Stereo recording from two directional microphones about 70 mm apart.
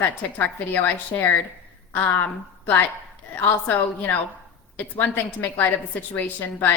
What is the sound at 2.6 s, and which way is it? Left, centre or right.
A woman's voice, left.